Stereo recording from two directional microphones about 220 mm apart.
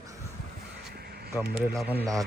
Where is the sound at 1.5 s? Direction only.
5° right (ahead or behind).